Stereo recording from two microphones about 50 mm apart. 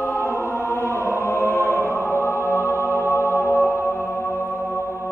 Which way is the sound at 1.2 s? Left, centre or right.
Left.